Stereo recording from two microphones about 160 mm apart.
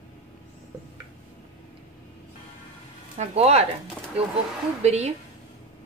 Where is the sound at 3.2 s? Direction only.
40° right (ahead or behind).